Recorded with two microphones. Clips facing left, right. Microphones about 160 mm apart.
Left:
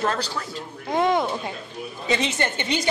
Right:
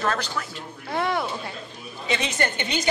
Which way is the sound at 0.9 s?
20° left (ahead or behind).